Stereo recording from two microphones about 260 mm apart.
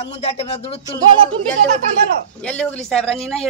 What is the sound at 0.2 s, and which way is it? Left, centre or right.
Speech, left.